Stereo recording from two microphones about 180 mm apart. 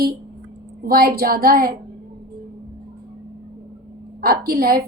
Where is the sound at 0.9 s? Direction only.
60° right (ahead or behind).